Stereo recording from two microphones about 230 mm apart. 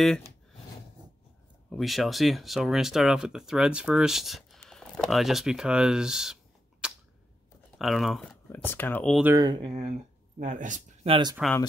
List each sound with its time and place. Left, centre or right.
0.0 s speech: centre
1.7 s speech: centre
9.2 s speech: centre; by 11.1 s right
11.4 s speech: centre